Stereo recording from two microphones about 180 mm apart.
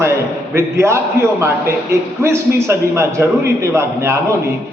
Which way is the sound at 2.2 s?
15° right (ahead or behind).